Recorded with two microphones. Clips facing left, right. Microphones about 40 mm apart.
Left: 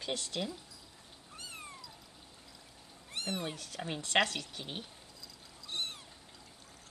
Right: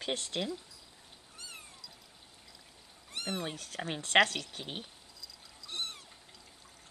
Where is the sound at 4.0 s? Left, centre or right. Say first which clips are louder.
Right 4 dB; right.